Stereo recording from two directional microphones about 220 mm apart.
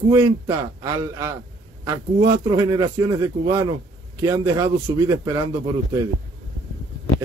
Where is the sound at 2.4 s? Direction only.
20° right (ahead or behind).